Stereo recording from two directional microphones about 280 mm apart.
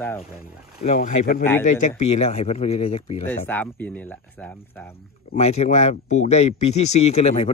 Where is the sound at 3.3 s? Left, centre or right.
Centre.